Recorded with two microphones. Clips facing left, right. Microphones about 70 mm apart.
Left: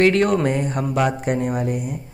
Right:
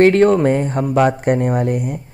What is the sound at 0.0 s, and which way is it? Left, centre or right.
Speech, right.